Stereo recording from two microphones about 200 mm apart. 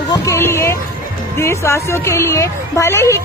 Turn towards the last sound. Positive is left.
turn(degrees=15)  # may be behind; listen again after turning